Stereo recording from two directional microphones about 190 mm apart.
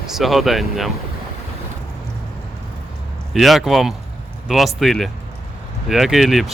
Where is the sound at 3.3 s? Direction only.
Centre (ahead or behind).